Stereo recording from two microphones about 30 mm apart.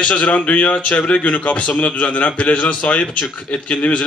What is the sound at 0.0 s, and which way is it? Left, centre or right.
A man's voice, left.